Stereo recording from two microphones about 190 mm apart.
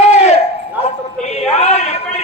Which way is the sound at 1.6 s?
35° left (ahead or behind).